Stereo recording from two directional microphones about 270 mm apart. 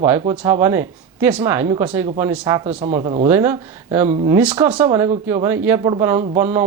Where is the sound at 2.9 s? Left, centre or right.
Right.